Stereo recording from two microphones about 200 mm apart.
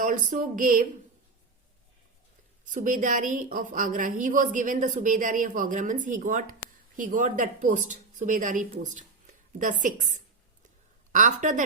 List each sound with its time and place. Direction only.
0.0 s a woman's voice: 40° right (ahead or behind)
2.6 s a woman's voice: 40° right (ahead or behind)